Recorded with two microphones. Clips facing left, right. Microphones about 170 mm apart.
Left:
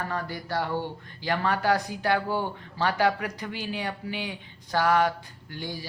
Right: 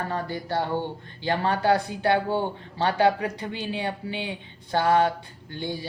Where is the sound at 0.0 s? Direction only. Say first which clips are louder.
Right 3 dB; 25° right (ahead or behind).